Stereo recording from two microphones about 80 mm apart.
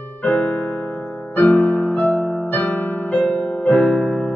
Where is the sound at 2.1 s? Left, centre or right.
Centre.